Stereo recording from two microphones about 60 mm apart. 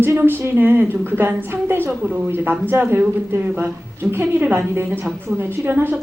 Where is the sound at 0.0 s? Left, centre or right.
Right.